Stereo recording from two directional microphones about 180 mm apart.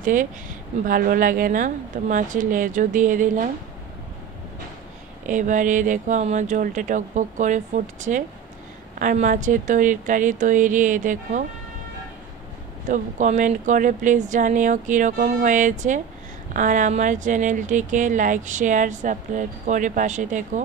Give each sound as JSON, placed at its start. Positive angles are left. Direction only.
{"t": 0.0, "sound": "speech", "side_deg": -45}
{"t": 5.2, "sound": "speech", "side_deg": -45}
{"t": 12.8, "sound": "speech", "side_deg": -45}